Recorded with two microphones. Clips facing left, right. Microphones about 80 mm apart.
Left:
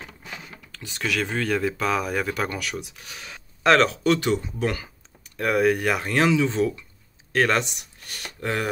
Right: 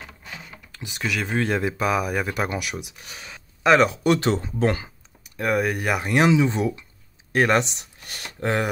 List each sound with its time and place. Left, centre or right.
0.7 s speech: centre
1.3 s speech: right
4.4 s speech: right
5.4 s speech: centre; by 8.6 s right